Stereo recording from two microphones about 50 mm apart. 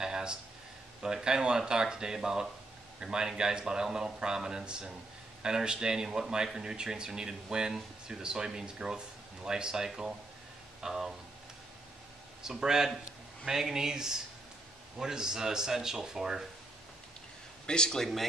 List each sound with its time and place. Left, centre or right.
0.0 s a sound: centre
1.0 s speech: centre
12.4 s speech: centre
17.6 s speech: centre